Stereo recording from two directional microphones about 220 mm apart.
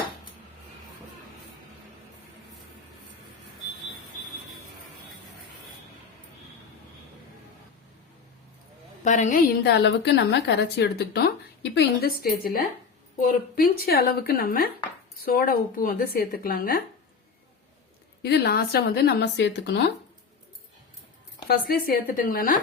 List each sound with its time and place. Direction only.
9.0 s a woman's voice: 35° left (ahead or behind)
18.2 s a woman's voice: 50° left (ahead or behind)
21.4 s speech: 45° left (ahead or behind)